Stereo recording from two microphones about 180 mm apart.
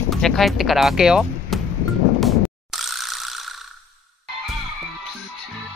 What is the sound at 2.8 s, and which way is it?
Ratchet, centre (ahead or behind).